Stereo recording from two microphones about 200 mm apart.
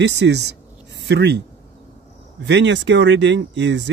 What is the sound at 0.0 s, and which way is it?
Speech, 60° right (ahead or behind).